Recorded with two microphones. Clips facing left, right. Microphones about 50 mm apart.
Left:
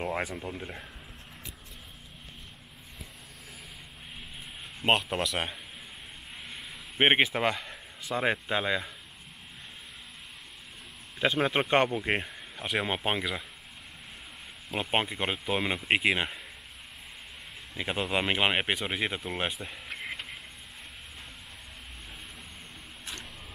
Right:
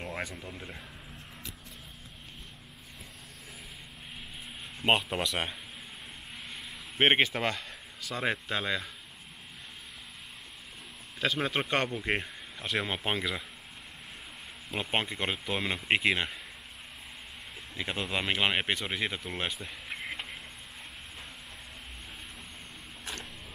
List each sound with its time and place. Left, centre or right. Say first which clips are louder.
0.0 s speech: left 5 dB; centre
4.8 s a man's voice: left 1 dB; centre
11.1 s a man's voice: left 4 dB; centre
14.7 s speech: left 2 dB; centre
17.7 s speech: left 3 dB; centre